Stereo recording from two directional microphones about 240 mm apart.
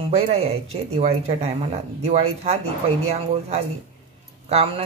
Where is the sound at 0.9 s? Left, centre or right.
Right.